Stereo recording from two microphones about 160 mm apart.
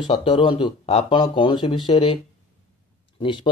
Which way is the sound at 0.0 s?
30° left (ahead or behind).